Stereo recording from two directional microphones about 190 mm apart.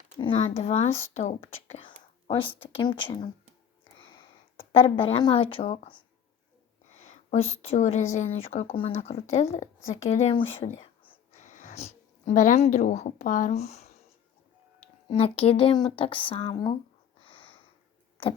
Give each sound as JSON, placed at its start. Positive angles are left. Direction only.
{"t": 0.2, "sound": "speech", "side_deg": 30}
{"t": 4.8, "sound": "speech", "side_deg": 30}
{"t": 10.8, "sound": "whispering", "side_deg": 30}
{"t": 11.4, "sound": "speech", "side_deg": 40}
{"t": 15.1, "sound": "speech", "side_deg": 30}
{"t": 17.2, "sound": "sniff", "side_deg": 25}